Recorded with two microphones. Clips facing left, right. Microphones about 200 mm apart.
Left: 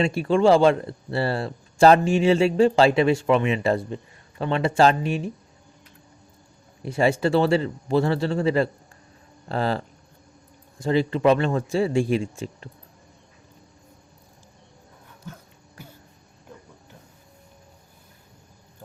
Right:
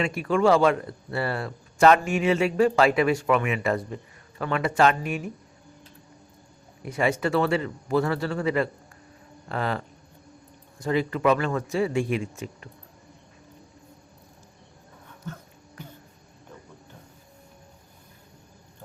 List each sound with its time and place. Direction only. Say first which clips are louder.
0.0 s speech: left 3 dB; 30° left (ahead or behind)
6.8 s speech: left 4 dB; 30° left (ahead or behind)
15.3 s music: right 3 dB; 10° left (ahead or behind)
15.8 s a sound: right 2 dB; 10° left (ahead or behind)